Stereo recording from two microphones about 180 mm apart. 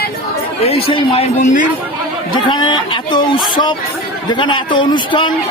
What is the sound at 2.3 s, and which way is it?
A man's voice, 25° left (ahead or behind).